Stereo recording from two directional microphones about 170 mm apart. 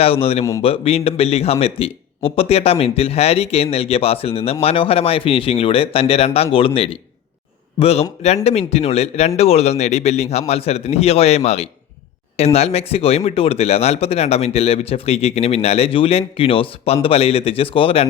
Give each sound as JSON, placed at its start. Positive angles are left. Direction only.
{"t": 0.0, "sound": "speech", "side_deg": 35}